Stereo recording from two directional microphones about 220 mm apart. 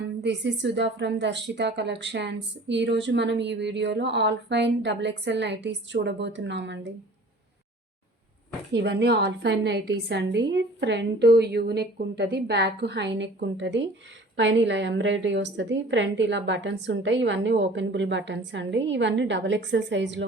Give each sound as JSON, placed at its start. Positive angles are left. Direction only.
{"t": 0.2, "sound": "a woman's voice", "side_deg": -55}
{"t": 8.7, "sound": "a woman's voice", "side_deg": -50}